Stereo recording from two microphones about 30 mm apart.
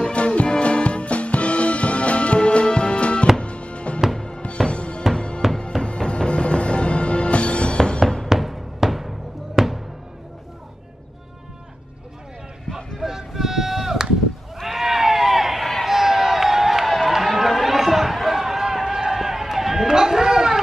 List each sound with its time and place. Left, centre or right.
0.0 s music: left
5.4 s music: centre
5.8 s music: left
7.7 s music: left
8.3 s music: centre
12.7 s a sound: centre
14.8 s run: centre
15.8 s a sound: centre
17.1 s run: centre
19.9 s a sound: centre